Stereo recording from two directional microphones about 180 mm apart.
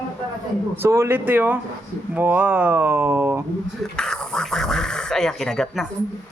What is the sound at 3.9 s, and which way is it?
Speech, 5° left (ahead or behind).